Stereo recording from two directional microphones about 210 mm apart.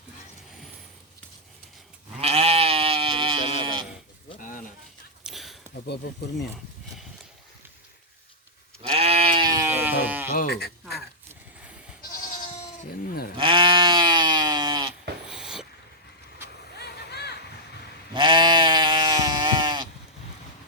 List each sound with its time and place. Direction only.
2.1 s sheep: 30° right (ahead or behind)
4.4 s a sound: 40° left (ahead or behind)
5.2 s a sound: centre (ahead or behind)
5.7 s speech: 55° left (ahead or behind)
8.9 s sheep: 25° right (ahead or behind); by 10.2 s 10° right (ahead or behind)
10.3 s speech: 50° left (ahead or behind)
12.2 s goat: 40° left (ahead or behind)
13.3 s sheep: 25° right (ahead or behind)
15.3 s dog: 5° right (ahead or behind)
16.7 s a sound: 50° left (ahead or behind)
18.1 s sheep: 25° right (ahead or behind)